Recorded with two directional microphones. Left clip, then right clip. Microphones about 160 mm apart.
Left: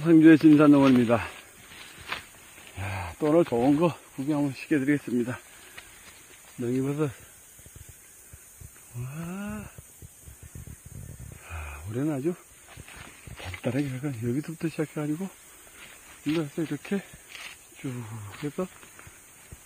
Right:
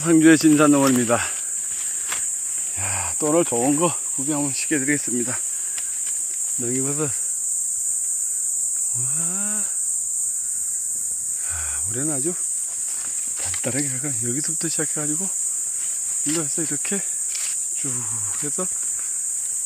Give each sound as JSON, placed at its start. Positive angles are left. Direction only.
{"t": 0.0, "sound": "speech", "side_deg": -15}
{"t": 2.8, "sound": "cricket", "side_deg": -15}
{"t": 3.3, "sound": "speech", "side_deg": -15}
{"t": 6.6, "sound": "speech", "side_deg": -15}
{"t": 9.2, "sound": "speech", "side_deg": -5}
{"t": 11.9, "sound": "speech", "side_deg": 0}
{"t": 13.7, "sound": "speech", "side_deg": -5}
{"t": 16.3, "sound": "speech", "side_deg": -10}